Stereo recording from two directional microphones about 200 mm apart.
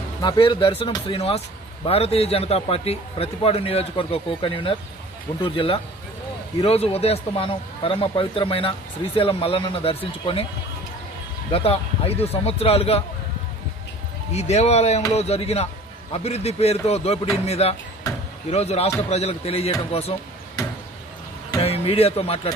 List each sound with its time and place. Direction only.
0.2 s a man's voice: 25° left (ahead or behind)
11.5 s a man's voice: 30° left (ahead or behind)
14.3 s a man's voice: 35° left (ahead or behind)
18.0 s chop: 15° left (ahead or behind)
18.5 s a man's voice: 30° left (ahead or behind)
20.6 s a sound: 20° left (ahead or behind)
21.6 s a man's voice: 30° left (ahead or behind)